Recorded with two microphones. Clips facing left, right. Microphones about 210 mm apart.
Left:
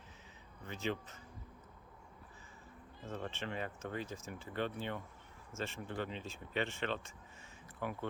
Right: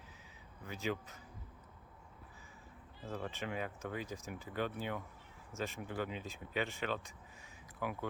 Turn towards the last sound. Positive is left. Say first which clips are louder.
# even
turn(degrees=-10)  # may be behind; listen again after turning